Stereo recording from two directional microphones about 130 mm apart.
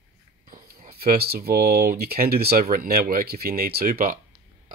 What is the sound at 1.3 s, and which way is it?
Speech, 90° right.